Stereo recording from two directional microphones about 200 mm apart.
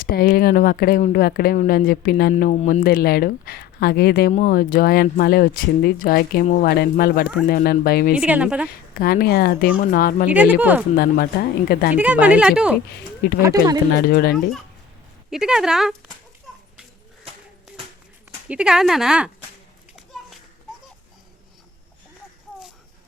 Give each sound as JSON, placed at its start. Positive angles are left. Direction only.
{"t": 0.0, "sound": "speech", "side_deg": 45}
{"t": 8.1, "sound": "speech", "side_deg": -5}
{"t": 9.0, "sound": "speech", "side_deg": 50}
{"t": 10.2, "sound": "speech", "side_deg": -10}
{"t": 10.9, "sound": "speech", "side_deg": 50}
{"t": 11.9, "sound": "speech", "side_deg": -5}
{"t": 13.4, "sound": "speech", "side_deg": -15}
{"t": 14.0, "sound": "speech", "side_deg": 50}
{"t": 15.3, "sound": "speech", "side_deg": -5}
{"t": 18.4, "sound": "speech", "side_deg": -5}